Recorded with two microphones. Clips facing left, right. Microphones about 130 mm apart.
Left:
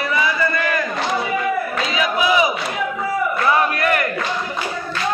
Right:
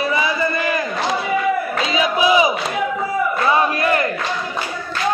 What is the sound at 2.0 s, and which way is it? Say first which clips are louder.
Battle cry: right 2 dB; 20° right (ahead or behind).